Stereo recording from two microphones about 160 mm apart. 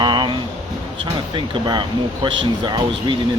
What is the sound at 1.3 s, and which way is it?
Speech, 30° right (ahead or behind).